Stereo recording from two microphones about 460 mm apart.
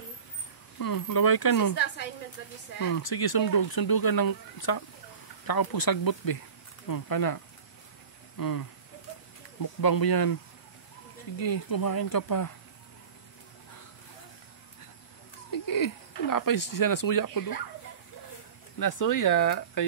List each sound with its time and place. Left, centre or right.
0.7 s speech: left
2.8 s speech: left
8.4 s speech: left
11.3 s speech: left
15.5 s wheeze: left
16.3 s speech: left
18.8 s speech: left